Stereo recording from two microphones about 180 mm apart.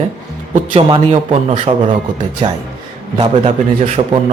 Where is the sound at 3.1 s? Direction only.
30° right (ahead or behind).